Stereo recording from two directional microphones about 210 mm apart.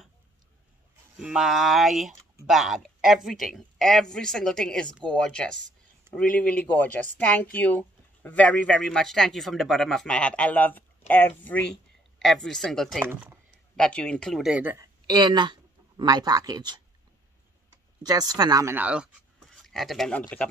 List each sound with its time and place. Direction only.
1.1 s speech: 5° right (ahead or behind)
13.0 s speech: 10° right (ahead or behind)
13.7 s speech: 5° left (ahead or behind)
15.0 s speech: 20° right (ahead or behind)
18.0 s speech: 20° right (ahead or behind); by 20.4 s 5° left (ahead or behind)